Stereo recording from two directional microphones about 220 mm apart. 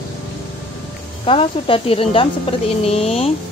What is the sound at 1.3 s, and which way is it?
A woman's voice, 25° left (ahead or behind).